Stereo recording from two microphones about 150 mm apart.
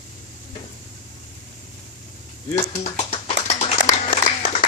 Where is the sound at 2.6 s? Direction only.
50° left (ahead or behind).